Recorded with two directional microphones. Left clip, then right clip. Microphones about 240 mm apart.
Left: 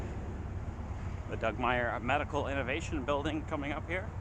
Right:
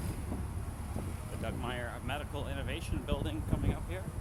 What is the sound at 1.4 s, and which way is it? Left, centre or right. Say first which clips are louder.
Speech: left 9 dB; left.